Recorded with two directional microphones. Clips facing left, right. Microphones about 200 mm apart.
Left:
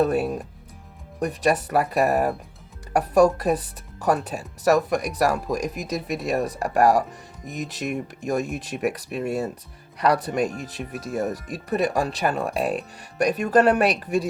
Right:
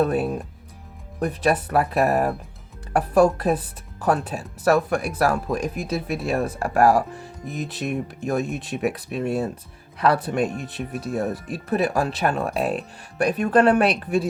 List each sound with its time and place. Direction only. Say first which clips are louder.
0.0 s speech: even; centre (ahead or behind)
5.7 s speech: right 2 dB; 40° left (ahead or behind)
6.1 s speech: left 1 dB; centre (ahead or behind)